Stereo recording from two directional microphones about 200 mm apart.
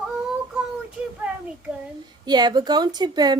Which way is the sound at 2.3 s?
20° right (ahead or behind).